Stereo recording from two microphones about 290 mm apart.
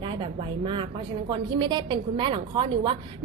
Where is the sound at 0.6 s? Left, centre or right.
Centre.